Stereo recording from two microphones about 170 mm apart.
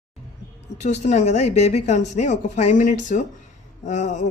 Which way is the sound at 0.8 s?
40° left (ahead or behind).